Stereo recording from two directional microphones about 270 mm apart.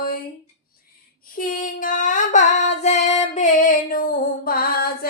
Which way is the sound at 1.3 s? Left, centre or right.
Left.